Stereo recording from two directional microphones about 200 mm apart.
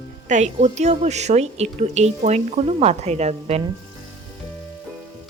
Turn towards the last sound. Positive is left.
turn(degrees=-30)  # may be behind; listen again after turning